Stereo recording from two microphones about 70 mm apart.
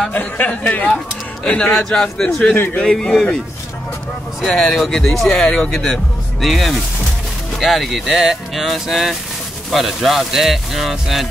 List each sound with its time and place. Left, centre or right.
0.1 s speech: left
2.5 s a man's voice: left
2.8 s speech: centre
4.6 s speech: centre